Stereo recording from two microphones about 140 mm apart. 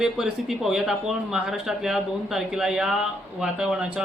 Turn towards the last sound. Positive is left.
turn(degrees=-5)  # may be behind; listen again after turning